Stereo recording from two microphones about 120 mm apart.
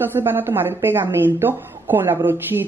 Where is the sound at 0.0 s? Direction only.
20° right (ahead or behind).